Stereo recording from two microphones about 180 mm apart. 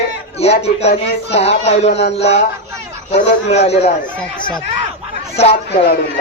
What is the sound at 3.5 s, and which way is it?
Speech, 35° left (ahead or behind).